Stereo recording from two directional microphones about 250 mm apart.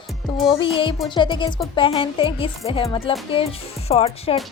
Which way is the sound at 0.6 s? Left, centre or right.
Left.